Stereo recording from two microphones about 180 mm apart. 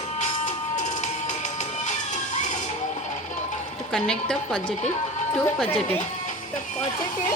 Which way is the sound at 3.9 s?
5° left (ahead or behind).